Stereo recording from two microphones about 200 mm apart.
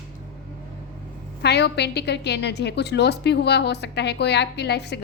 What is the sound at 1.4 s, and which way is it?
A woman's voice, 55° left (ahead or behind).